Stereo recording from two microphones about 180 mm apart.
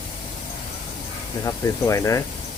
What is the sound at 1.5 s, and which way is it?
Speech, 15° left (ahead or behind).